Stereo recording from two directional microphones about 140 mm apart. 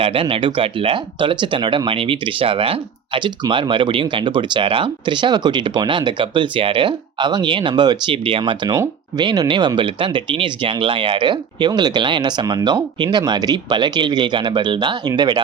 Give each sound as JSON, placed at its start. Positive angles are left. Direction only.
{"t": 0.0, "sound": "speech", "side_deg": -40}